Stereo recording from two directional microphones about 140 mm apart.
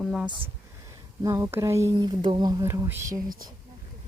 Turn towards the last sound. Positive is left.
turn(degrees=-20)  # may be behind; listen again after turning